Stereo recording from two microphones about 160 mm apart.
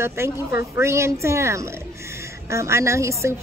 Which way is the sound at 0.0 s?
15° right (ahead or behind).